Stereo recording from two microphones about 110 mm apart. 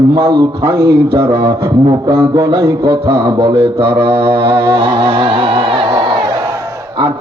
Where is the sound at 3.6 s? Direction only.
50° right (ahead or behind).